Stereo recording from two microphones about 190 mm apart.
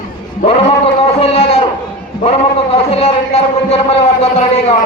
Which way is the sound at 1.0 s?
30° left (ahead or behind).